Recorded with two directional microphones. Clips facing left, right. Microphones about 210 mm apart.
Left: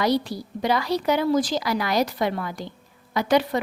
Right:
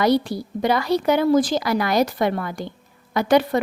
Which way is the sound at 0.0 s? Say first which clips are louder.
Right 4 dB; 50° right (ahead or behind).